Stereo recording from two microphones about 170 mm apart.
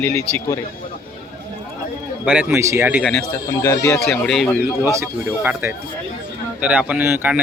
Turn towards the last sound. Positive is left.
turn(degrees=-10)  # may be behind; listen again after turning